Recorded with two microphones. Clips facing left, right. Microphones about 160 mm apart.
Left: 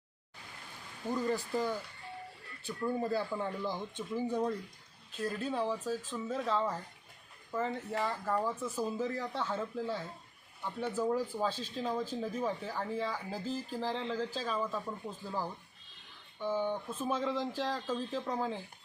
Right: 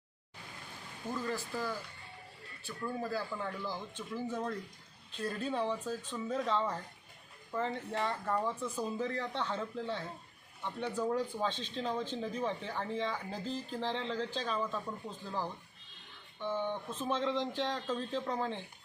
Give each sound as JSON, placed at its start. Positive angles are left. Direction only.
{"t": 1.1, "sound": "speech", "side_deg": 15}
{"t": 3.0, "sound": "speech", "side_deg": 20}
{"t": 5.1, "sound": "speech", "side_deg": 0}